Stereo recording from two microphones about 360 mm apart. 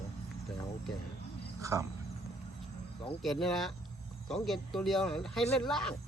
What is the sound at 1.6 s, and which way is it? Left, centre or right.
Speech, centre.